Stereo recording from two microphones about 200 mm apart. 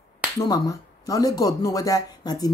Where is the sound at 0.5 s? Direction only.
15° left (ahead or behind).